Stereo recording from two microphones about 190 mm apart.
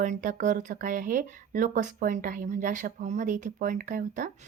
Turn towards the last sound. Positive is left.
turn(degrees=-40)  # may be behind; listen again after turning